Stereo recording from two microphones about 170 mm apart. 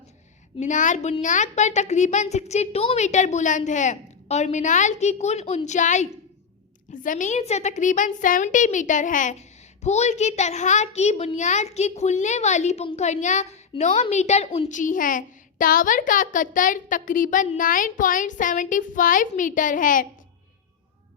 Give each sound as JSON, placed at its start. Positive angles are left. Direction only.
{"t": 0.6, "sound": "a child's voice", "side_deg": 45}